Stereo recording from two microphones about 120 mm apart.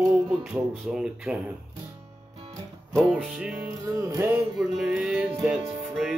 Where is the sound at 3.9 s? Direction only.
25° right (ahead or behind).